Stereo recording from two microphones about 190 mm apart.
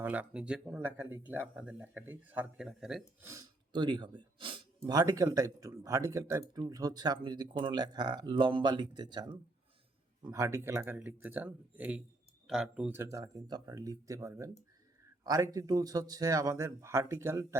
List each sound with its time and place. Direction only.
0.0 s speech: 10° right (ahead or behind)
3.2 s speech: 20° right (ahead or behind)